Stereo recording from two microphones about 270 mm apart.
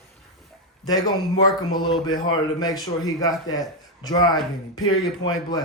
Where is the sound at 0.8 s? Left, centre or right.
Centre.